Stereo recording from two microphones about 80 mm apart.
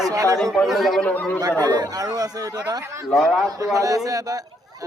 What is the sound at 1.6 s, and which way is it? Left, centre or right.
Speech, right.